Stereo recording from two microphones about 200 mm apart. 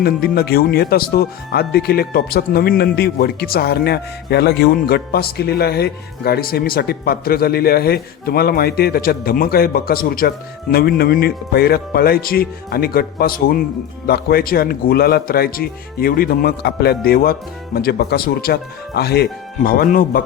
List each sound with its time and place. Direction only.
0.0 s speech: 50° left (ahead or behind)